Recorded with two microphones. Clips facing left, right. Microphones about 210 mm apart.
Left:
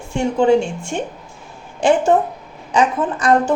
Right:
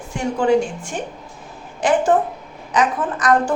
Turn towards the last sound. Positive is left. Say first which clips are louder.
# left 2 dB
turn(degrees=30)  # may be behind; listen again after turning